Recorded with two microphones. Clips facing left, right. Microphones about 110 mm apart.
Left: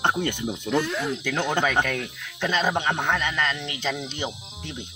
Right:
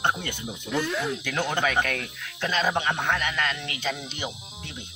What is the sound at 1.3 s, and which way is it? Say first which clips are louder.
Speech: left 3 dB; 15° left (ahead or behind).